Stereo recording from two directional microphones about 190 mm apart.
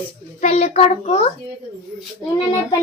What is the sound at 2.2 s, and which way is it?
Speech, 20° left (ahead or behind).